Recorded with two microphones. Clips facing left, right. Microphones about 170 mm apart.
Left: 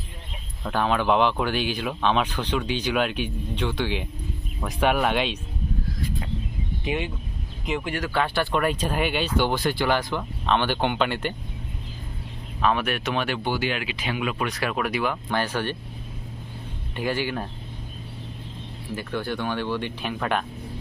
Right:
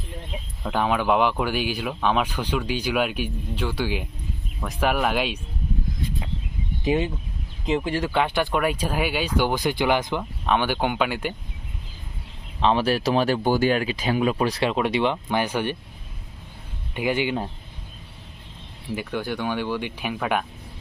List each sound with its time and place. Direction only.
0.6 s speech: 10° right (ahead or behind)
6.8 s speech: 35° right (ahead or behind)
8.1 s speech: 15° right (ahead or behind)
12.5 s speech: 25° right (ahead or behind)
16.9 s speech: 15° right (ahead or behind)
18.9 s speech: 15° right (ahead or behind)